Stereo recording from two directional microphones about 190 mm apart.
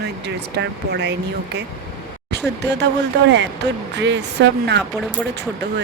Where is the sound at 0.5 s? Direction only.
65° right (ahead or behind).